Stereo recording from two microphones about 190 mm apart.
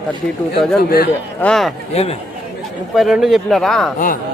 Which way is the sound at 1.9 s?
35° left (ahead or behind).